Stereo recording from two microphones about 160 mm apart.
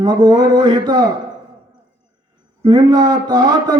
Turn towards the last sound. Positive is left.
turn(degrees=-25)  # may be behind; listen again after turning